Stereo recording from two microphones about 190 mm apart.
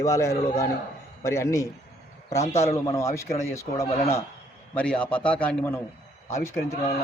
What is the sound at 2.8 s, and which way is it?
A man's voice, 15° left (ahead or behind).